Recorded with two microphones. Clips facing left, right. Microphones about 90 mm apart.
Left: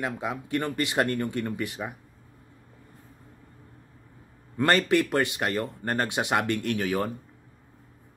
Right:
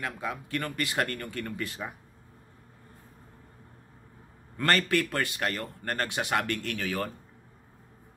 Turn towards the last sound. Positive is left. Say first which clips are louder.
# left 5 dB
turn(degrees=20)  # may be behind; listen again after turning